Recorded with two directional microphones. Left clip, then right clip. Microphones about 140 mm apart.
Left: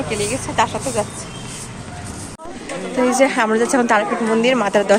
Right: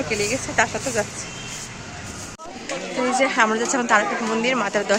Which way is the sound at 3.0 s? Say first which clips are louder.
Left 3 dB; 15° left (ahead or behind).